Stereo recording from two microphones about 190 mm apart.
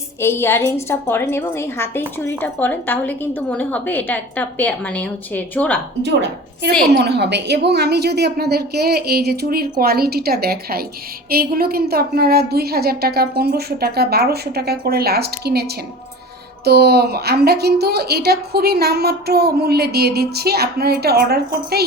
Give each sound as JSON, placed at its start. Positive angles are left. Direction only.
{"t": 0.2, "sound": "a woman's voice", "side_deg": 10}
{"t": 6.9, "sound": "a woman's voice", "side_deg": -60}